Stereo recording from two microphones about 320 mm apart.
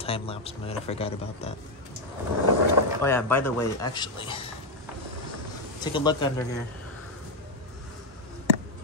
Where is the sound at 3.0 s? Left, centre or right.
Centre.